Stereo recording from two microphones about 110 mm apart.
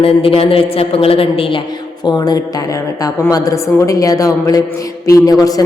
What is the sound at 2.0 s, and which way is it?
A woman's voice, 40° left (ahead or behind).